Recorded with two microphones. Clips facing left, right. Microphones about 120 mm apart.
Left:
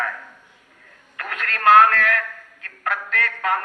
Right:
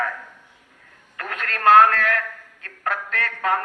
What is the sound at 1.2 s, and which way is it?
Speech, 30° right (ahead or behind).